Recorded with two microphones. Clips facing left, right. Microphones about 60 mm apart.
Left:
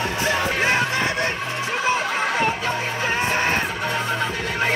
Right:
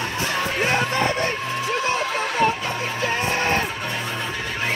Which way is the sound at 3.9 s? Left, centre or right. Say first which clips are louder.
Left 4 dB; left.